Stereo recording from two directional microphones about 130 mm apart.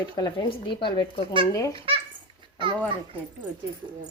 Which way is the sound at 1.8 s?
40° right (ahead or behind).